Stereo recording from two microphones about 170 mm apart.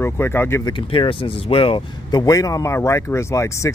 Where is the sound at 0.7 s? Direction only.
30° left (ahead or behind).